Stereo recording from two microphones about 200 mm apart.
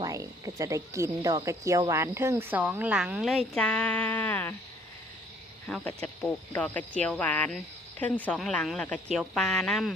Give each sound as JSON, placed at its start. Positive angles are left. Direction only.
{"t": 0.0, "sound": "speech", "side_deg": -15}
{"t": 5.6, "sound": "speech", "side_deg": 5}